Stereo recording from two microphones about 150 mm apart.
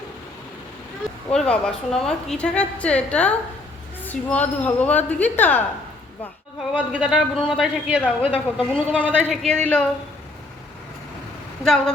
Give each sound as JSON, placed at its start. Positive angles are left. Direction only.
{"t": 1.3, "sound": "a woman's voice", "side_deg": 5}
{"t": 6.7, "sound": "a man's voice", "side_deg": -10}
{"t": 8.2, "sound": "a woman's voice", "side_deg": 40}
{"t": 8.7, "sound": "a woman's voice", "side_deg": 5}
{"t": 11.6, "sound": "speech", "side_deg": 5}